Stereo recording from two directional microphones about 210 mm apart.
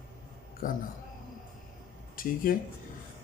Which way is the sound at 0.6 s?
40° left (ahead or behind).